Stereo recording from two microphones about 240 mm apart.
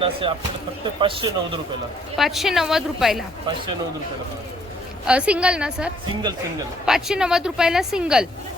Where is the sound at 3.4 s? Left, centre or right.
Centre.